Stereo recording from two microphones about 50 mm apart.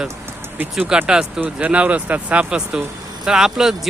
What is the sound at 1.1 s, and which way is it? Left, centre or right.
Speech, centre.